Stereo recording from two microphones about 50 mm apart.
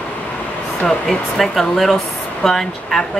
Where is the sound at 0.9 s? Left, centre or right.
Centre.